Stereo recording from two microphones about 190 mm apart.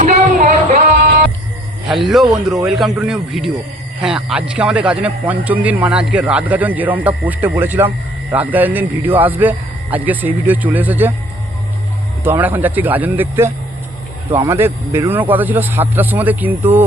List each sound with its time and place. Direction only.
0.0 s a sound: 40° right (ahead or behind)
2.0 s a man's voice: centre (ahead or behind)
12.2 s a man's voice: 10° right (ahead or behind)